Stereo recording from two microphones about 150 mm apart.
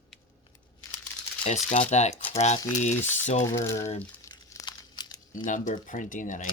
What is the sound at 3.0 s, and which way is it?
Speech, 15° left (ahead or behind).